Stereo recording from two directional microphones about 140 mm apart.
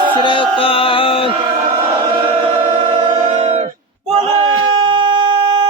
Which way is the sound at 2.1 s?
40° right (ahead or behind).